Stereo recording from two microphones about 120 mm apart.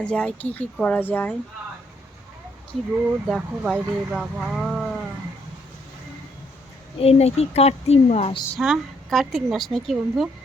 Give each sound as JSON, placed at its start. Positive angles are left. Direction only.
{"t": 0.0, "sound": "speech", "side_deg": 10}
{"t": 3.2, "sound": "speech", "side_deg": 0}
{"t": 7.0, "sound": "speech", "side_deg": 60}
{"t": 8.5, "sound": "speech", "side_deg": 0}